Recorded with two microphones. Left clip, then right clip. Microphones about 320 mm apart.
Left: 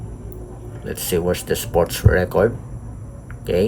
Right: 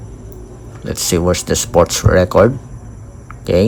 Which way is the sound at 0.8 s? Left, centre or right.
Centre.